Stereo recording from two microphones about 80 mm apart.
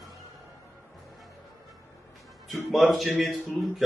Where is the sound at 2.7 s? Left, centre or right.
Centre.